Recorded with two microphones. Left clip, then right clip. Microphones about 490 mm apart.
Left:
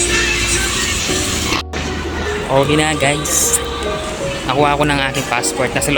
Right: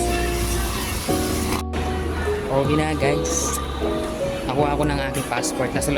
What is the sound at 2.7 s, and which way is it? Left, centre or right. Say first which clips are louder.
Speech: left 6 dB; right.